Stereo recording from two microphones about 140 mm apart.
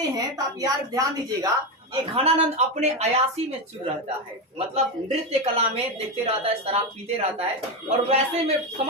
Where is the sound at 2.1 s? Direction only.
50° right (ahead or behind).